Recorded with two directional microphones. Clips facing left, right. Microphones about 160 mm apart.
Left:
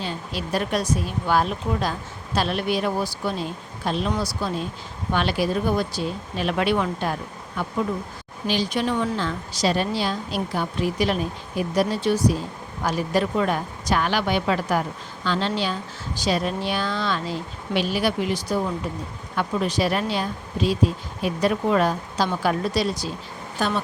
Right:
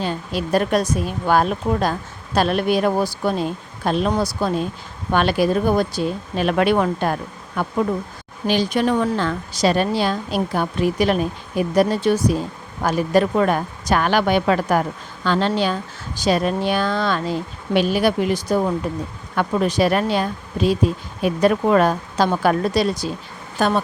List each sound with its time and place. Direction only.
0.0 s a woman's voice: 50° right (ahead or behind)